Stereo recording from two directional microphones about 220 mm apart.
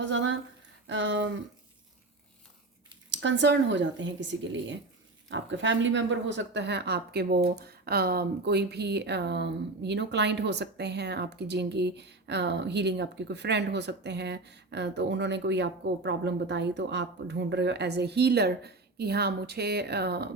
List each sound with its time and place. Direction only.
0.0 s a sound: 55° right (ahead or behind)
0.9 s speech: 55° right (ahead or behind)
3.1 s speech: 55° right (ahead or behind)